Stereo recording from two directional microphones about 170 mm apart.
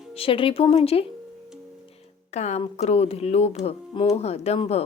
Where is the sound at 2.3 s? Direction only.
40° left (ahead or behind).